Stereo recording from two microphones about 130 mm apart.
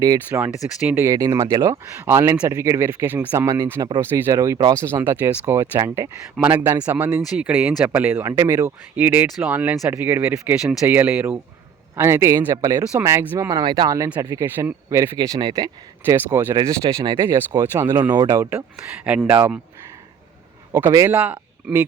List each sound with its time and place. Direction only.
0.3 s speech: 10° right (ahead or behind)
1.0 s speech: 25° right (ahead or behind)
13.6 s speech: 35° right (ahead or behind)
16.0 s speech: 20° right (ahead or behind)
17.6 s speech: 15° right (ahead or behind)
18.1 s speech: 30° right (ahead or behind)
18.9 s speech: 10° right (ahead or behind)
20.9 s speech: 25° right (ahead or behind)